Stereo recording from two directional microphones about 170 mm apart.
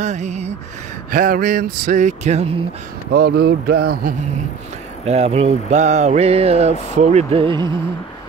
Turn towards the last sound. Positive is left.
turn(degrees=-30)  # may be behind; listen again after turning